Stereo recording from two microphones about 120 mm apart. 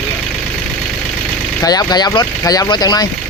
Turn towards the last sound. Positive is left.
turn(degrees=35)  # may be behind; listen again after turning